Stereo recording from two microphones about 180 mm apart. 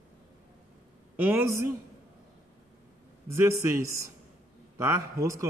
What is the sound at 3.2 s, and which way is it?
A man's voice, 15° right (ahead or behind).